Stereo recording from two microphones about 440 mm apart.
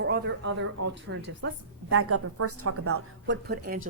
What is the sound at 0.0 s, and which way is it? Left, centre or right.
A woman's voice, right.